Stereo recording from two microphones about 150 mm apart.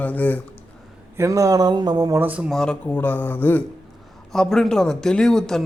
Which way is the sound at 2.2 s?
10° right (ahead or behind).